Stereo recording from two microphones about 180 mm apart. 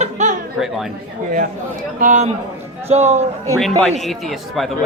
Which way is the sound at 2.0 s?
45° right (ahead or behind).